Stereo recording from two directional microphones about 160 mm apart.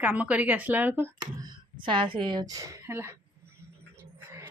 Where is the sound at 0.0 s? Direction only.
10° right (ahead or behind).